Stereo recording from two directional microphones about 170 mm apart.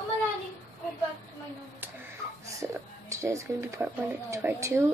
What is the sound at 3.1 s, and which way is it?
Speech, 15° right (ahead or behind).